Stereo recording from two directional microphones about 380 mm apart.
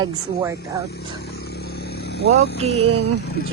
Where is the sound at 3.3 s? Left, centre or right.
Left.